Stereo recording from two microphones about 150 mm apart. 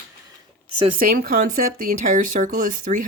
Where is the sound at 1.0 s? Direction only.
70° right (ahead or behind).